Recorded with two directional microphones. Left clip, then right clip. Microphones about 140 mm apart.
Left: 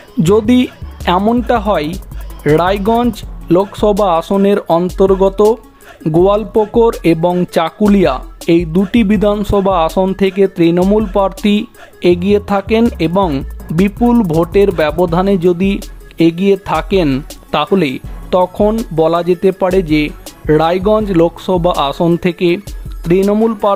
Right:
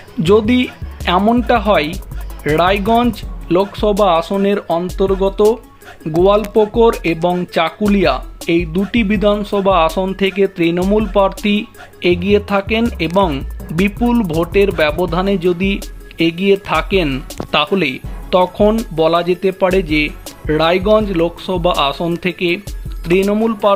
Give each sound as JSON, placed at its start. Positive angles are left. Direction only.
{"t": 0.2, "sound": "speech", "side_deg": 40}
{"t": 6.1, "sound": "speech", "side_deg": 50}